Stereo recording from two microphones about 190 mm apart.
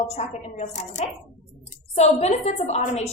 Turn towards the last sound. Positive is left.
turn(degrees=35)  # may be behind; listen again after turning